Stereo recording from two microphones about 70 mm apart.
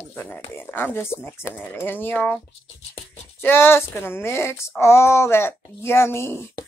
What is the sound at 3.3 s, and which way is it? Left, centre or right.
Speech, left.